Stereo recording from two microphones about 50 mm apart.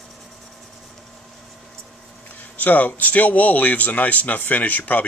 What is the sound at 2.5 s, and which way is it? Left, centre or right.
Speech, left.